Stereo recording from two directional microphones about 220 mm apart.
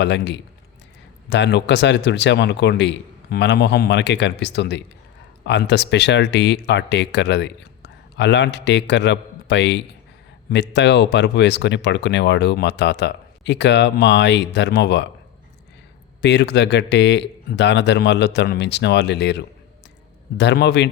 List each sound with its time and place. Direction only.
0.0 s speech: 50° left (ahead or behind)
16.2 s speech: 50° left (ahead or behind)